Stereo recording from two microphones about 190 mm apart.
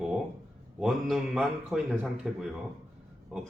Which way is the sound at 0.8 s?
Centre (ahead or behind).